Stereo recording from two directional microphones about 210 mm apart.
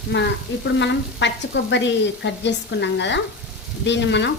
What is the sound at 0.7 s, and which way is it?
Sizzle, 60° left (ahead or behind).